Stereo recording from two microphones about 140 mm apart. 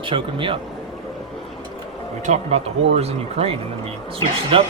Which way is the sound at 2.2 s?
55° right (ahead or behind).